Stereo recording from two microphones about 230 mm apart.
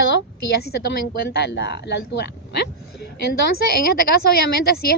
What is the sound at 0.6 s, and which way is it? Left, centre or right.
A woman's voice, left.